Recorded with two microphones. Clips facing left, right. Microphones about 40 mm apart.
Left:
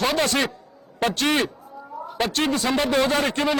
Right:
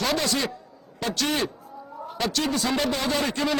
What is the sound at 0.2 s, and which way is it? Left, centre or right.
A man's voice, left.